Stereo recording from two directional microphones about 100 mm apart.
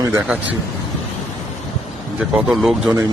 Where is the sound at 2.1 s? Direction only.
5° right (ahead or behind).